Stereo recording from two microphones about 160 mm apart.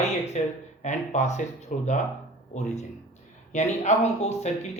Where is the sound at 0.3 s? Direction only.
45° left (ahead or behind).